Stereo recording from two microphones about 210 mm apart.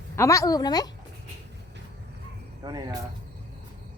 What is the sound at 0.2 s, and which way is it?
Speech, 15° left (ahead or behind).